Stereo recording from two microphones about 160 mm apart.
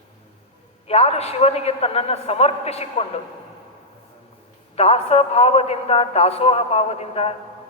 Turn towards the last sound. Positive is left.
turn(degrees=40)  # may be behind; listen again after turning